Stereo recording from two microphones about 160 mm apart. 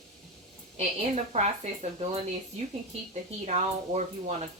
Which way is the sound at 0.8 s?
40° right (ahead or behind).